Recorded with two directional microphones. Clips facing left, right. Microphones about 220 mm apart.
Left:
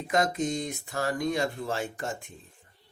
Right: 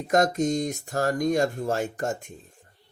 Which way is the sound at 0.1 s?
45° right (ahead or behind).